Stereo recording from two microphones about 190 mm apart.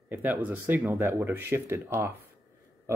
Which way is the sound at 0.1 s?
10° right (ahead or behind).